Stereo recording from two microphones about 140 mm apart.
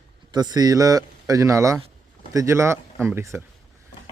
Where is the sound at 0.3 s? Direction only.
30° right (ahead or behind).